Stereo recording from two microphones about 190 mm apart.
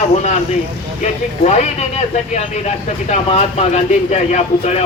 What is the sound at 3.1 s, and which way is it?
A man's voice, 35° left (ahead or behind).